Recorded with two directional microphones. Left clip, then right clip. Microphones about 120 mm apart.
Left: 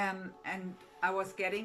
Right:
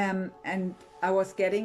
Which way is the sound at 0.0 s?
65° right (ahead or behind).